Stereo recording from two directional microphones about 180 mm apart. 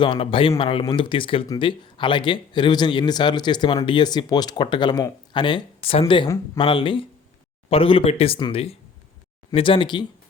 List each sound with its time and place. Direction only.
0.0 s speech: 30° left (ahead or behind)